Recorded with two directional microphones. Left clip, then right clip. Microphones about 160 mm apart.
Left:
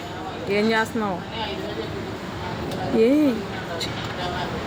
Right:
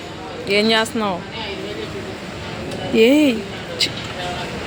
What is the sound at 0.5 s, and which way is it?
Speech, 20° right (ahead or behind).